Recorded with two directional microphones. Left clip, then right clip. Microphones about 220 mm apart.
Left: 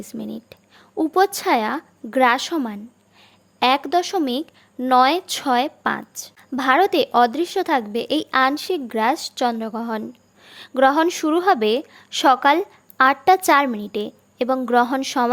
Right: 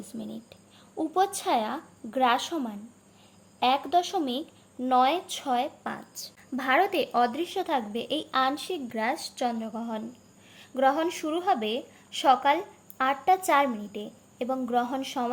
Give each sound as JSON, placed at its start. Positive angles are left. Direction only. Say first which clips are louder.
{"t": 0.2, "sound": "speech", "louder": "left 7 dB", "side_deg": 55}